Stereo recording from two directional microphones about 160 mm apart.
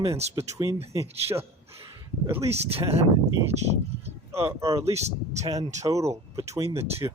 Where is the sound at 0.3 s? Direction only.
20° right (ahead or behind).